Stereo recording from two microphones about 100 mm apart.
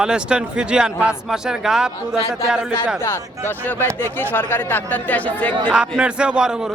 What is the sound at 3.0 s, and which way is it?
Speech, 25° left (ahead or behind).